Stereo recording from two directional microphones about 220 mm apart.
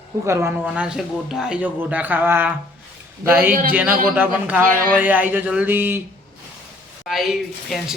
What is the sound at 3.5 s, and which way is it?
Speech, 40° right (ahead or behind).